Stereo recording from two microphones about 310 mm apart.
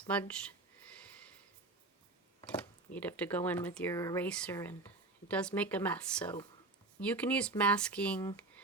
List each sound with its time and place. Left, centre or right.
0.1 s speech: centre
2.5 s speech: centre